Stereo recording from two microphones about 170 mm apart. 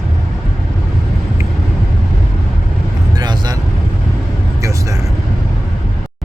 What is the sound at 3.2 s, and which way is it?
Vehicle, 25° right (ahead or behind).